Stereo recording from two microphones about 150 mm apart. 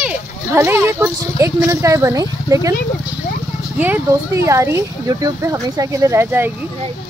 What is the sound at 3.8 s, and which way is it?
Speech, 10° right (ahead or behind).